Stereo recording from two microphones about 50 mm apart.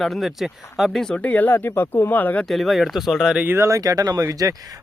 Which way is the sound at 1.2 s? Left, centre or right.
Left.